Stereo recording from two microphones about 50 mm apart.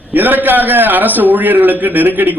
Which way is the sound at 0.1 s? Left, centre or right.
Right.